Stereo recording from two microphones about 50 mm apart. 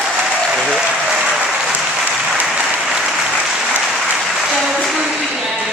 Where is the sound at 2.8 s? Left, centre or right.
Centre.